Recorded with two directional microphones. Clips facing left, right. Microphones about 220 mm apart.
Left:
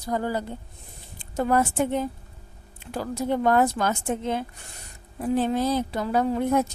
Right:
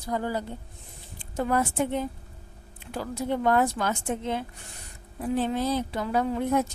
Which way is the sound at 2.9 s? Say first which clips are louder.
Left 3 dB; 40° left (ahead or behind).